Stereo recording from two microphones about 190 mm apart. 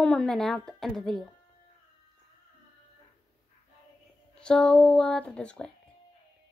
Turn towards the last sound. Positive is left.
turn(degrees=5)  # may be behind; listen again after turning